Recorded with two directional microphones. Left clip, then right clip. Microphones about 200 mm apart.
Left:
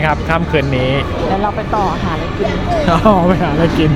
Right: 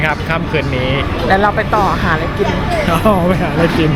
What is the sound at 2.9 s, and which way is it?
Speech, 10° left (ahead or behind).